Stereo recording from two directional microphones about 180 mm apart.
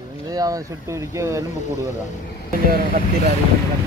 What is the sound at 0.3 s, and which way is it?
Speech, 20° right (ahead or behind).